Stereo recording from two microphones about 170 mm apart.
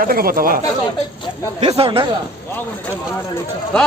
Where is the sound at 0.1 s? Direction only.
60° right (ahead or behind).